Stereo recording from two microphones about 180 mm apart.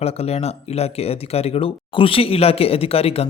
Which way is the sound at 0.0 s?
35° left (ahead or behind).